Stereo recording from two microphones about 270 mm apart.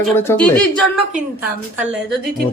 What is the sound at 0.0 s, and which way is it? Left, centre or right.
Speech, centre.